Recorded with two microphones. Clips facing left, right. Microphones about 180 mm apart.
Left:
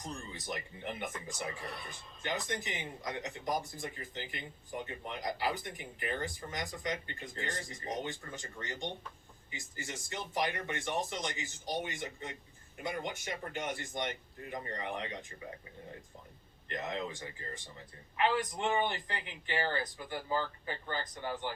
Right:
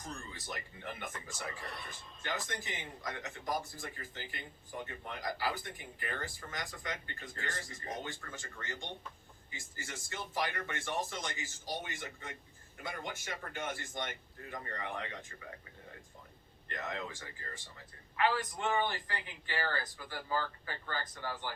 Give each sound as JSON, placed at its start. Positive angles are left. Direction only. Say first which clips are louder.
{"t": 0.0, "sound": "speech", "louder": "left 3 dB", "side_deg": 20}
{"t": 1.5, "sound": "speech", "louder": "left 2 dB", "side_deg": 0}
{"t": 2.5, "sound": "speech", "louder": "left 4 dB", "side_deg": 20}
{"t": 16.6, "sound": "speech", "louder": "left 3 dB", "side_deg": 20}